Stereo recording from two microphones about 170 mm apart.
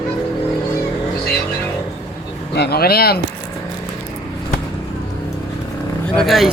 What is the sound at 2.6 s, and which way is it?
Speech, 70° left (ahead or behind).